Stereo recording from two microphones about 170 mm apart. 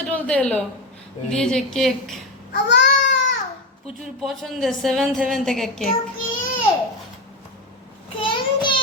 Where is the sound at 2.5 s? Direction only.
85° left.